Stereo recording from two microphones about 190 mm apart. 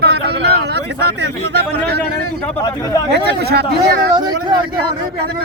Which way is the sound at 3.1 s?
60° right (ahead or behind).